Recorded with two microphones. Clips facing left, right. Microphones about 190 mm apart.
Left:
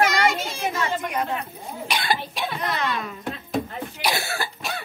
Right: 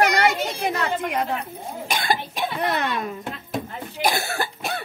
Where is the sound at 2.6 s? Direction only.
60° right (ahead or behind).